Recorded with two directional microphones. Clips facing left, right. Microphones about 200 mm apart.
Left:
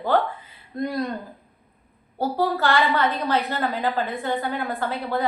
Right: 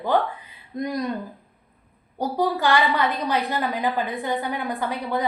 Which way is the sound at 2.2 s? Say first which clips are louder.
Even; 15° right (ahead or behind).